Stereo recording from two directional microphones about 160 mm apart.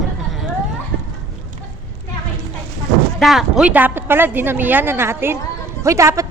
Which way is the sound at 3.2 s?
Centre (ahead or behind).